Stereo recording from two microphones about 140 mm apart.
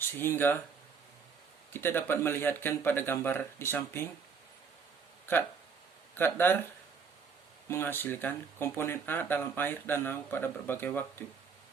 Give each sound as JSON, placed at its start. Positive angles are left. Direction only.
{"t": 0.2, "sound": "speech", "side_deg": 15}
{"t": 1.7, "sound": "speech", "side_deg": 15}
{"t": 6.1, "sound": "speech", "side_deg": 15}
{"t": 7.7, "sound": "speech", "side_deg": 15}